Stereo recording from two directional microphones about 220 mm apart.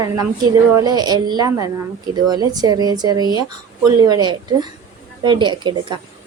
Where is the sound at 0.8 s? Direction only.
20° right (ahead or behind).